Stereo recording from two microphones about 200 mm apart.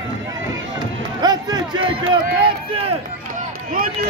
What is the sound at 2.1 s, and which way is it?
Run, 25° right (ahead or behind).